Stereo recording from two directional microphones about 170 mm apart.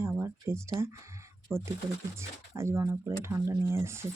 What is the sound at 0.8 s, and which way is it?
Speech, 15° right (ahead or behind).